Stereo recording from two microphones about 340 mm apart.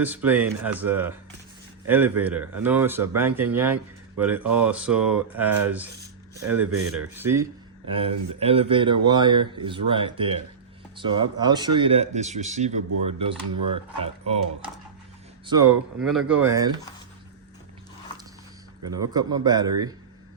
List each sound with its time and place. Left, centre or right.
0.0 s speech: centre
6.7 s speech: right
7.1 s speech: centre
13.5 s speech: right
14.0 s speech: centre
18.9 s speech: centre